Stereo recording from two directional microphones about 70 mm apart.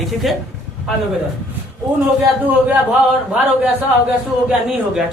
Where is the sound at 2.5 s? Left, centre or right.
Right.